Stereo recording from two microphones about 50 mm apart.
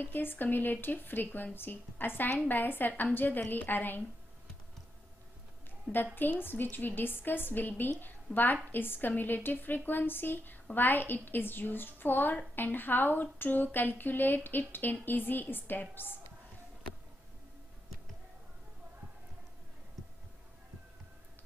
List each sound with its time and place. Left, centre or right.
0.0 s speech: left
6.1 s a woman's voice: left